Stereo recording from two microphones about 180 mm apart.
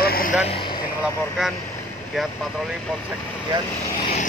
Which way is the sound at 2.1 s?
5° right (ahead or behind).